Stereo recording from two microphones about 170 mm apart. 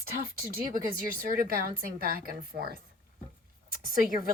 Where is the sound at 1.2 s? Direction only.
60° right (ahead or behind).